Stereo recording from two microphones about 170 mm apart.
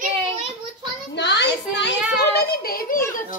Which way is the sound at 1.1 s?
90° left.